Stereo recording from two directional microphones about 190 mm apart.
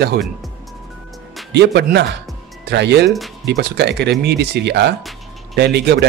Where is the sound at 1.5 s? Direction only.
65° right (ahead or behind).